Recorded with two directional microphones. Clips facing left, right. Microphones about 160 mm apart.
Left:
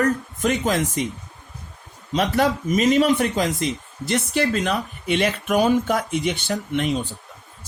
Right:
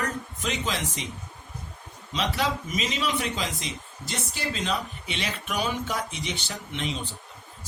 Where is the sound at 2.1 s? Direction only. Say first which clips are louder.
Left 8 dB; 50° left (ahead or behind).